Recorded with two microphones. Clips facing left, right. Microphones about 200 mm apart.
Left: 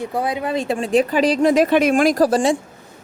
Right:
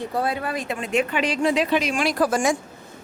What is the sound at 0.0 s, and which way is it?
Speech, 15° left (ahead or behind).